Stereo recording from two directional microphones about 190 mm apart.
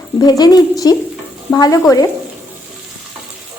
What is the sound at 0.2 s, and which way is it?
A woman's voice, 20° left (ahead or behind).